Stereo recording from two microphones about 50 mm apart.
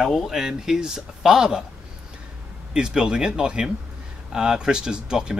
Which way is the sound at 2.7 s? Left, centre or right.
Centre.